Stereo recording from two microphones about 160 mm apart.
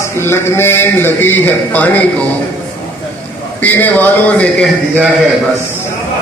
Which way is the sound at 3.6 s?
10° left (ahead or behind).